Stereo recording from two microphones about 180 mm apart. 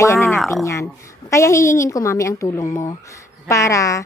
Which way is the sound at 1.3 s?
15° left (ahead or behind).